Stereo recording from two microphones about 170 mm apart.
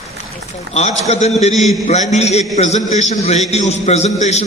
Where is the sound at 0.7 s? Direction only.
40° left (ahead or behind).